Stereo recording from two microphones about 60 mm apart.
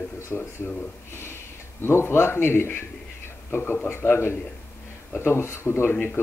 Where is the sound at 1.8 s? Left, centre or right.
Left.